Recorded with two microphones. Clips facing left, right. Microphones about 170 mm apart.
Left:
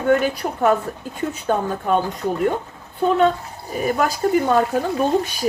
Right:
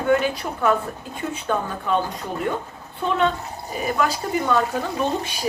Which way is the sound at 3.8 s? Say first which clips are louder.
Left 4 dB; 45° left (ahead or behind).